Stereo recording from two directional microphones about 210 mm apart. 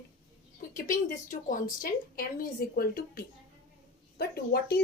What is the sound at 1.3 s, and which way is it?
Speech, 40° left (ahead or behind).